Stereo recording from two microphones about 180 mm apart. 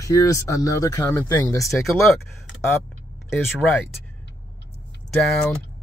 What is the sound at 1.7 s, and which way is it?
Speech, centre (ahead or behind).